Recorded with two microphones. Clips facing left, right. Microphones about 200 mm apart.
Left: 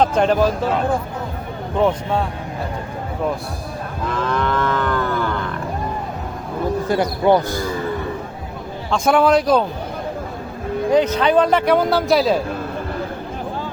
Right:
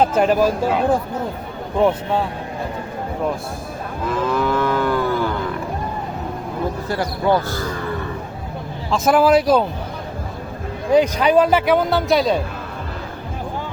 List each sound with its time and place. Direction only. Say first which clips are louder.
0.0 s speech: even; 5° right (ahead or behind)
1.8 s speech: right 1 dB; 5° right (ahead or behind)
4.1 s livestock: right 2 dB; 5° right (ahead or behind)
6.8 s speech: left 4 dB; 20° left (ahead or behind)
8.9 s speech: right 1 dB; 5° right (ahead or behind)
10.9 s speech: right 2 dB; 10° right (ahead or behind)